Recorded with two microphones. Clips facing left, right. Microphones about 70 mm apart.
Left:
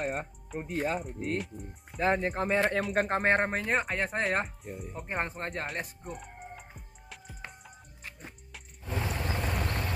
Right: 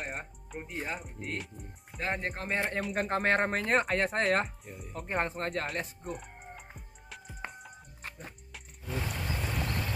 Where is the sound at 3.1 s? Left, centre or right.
Left.